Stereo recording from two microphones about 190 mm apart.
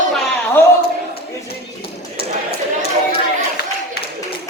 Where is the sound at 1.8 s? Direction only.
30° left (ahead or behind).